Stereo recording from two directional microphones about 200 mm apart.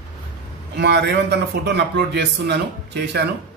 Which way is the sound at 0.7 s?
60° right (ahead or behind).